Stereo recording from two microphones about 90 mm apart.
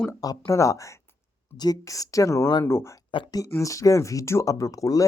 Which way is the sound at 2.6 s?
25° left (ahead or behind).